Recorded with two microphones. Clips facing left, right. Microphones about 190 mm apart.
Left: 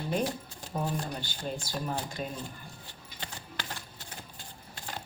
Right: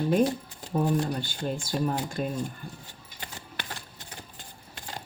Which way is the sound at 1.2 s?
50° right (ahead or behind).